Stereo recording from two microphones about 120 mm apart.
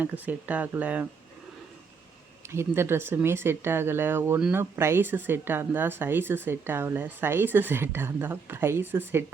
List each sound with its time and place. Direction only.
0.0 s speech: 15° right (ahead or behind)
2.5 s speech: 20° right (ahead or behind)